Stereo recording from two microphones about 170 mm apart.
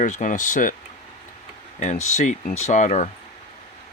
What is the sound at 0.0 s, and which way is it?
Speech, 45° left (ahead or behind).